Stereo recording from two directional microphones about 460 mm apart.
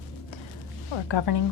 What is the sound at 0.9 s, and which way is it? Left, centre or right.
Speech, left.